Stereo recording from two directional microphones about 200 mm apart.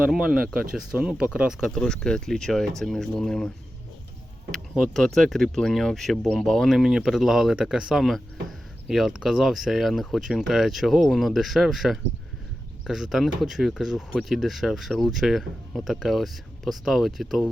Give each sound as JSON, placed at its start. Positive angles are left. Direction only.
{"t": 0.0, "sound": "speech", "side_deg": -5}
{"t": 4.7, "sound": "speech", "side_deg": 0}